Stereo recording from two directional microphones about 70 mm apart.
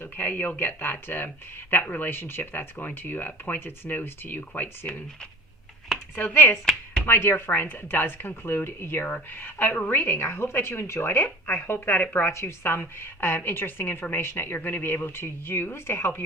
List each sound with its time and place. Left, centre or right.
0.0 s speech: left
6.1 s a woman's voice: left
10.0 s a woman's voice: left